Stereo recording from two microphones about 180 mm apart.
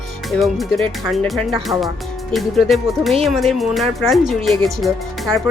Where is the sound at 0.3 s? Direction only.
Centre (ahead or behind).